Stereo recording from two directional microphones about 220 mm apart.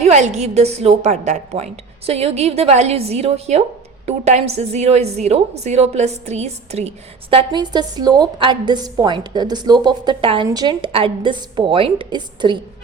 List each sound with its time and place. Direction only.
0.0 s a woman's voice: 30° right (ahead or behind)